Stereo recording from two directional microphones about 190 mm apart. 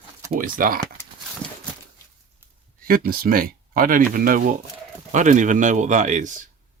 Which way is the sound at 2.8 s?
50° right (ahead or behind).